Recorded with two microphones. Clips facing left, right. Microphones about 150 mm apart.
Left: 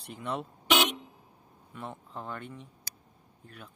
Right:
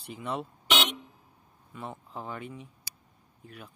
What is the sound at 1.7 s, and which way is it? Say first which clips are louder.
Speech: right 1 dB; centre (ahead or behind).